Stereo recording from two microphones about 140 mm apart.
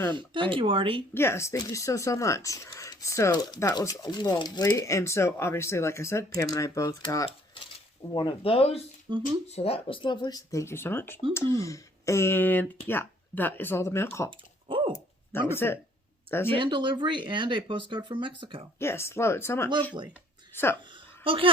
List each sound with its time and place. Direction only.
0.2 s speech: 35° right (ahead or behind)
1.1 s speech: 15° left (ahead or behind)
8.1 s speech: 35° left (ahead or behind)
9.1 s speech: 35° right (ahead or behind)
9.5 s speech: 45° left (ahead or behind); by 14.3 s 15° left (ahead or behind)
14.3 s typing: 35° right (ahead or behind)
15.3 s speech: 15° left (ahead or behind)
16.6 s speech: 35° right (ahead or behind)
18.8 s speech: 20° left (ahead or behind)
20.9 s a sound: 40° right (ahead or behind)